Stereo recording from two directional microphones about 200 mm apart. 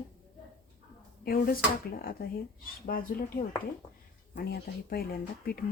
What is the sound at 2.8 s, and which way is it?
Speech, 45° left (ahead or behind).